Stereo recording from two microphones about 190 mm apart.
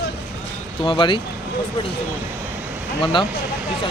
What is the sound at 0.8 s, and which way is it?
Speech, 25° left (ahead or behind).